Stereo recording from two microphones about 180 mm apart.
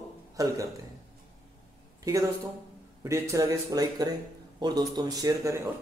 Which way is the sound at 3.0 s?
15° right (ahead or behind).